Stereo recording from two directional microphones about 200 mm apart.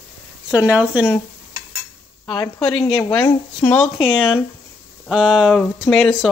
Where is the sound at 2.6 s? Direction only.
5° left (ahead or behind).